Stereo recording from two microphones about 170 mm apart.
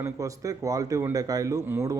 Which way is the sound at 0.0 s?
20° right (ahead or behind).